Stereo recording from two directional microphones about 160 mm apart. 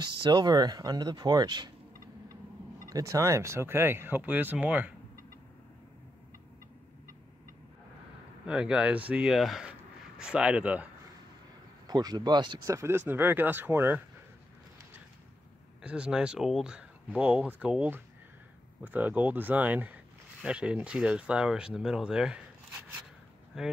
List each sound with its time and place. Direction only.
0.0 s speech: 30° right (ahead or behind)
2.9 s speech: 20° right (ahead or behind)
8.5 s speech: 5° right (ahead or behind)
11.9 s speech: 25° right (ahead or behind)
15.8 s speech: 5° right (ahead or behind)
23.5 s speech: centre (ahead or behind)